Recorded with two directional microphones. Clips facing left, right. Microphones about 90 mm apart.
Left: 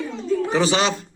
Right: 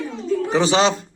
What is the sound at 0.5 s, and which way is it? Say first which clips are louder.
Speech: right 4 dB; 30° right (ahead or behind).